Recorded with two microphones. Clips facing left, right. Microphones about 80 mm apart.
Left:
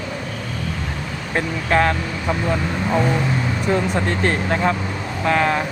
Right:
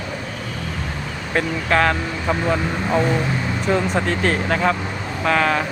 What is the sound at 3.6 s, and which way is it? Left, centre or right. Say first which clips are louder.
Speech: right 1 dB; centre.